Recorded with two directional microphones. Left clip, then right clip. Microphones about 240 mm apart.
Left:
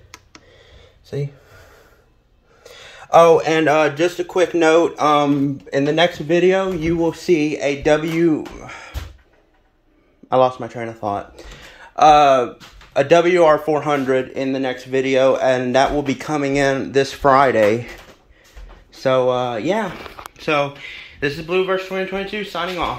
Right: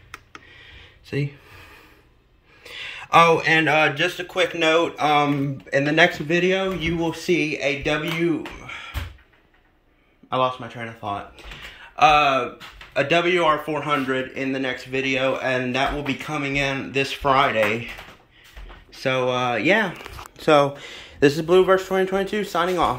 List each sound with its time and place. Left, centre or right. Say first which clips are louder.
3.3 s speech: left 4 dB; centre
10.3 s speech: left 7 dB; left
18.9 s speech: left 5 dB; centre
20.3 s speech: right 2 dB; centre